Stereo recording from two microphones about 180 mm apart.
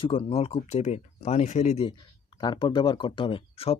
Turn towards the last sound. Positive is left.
turn(degrees=30)  # may be behind; listen again after turning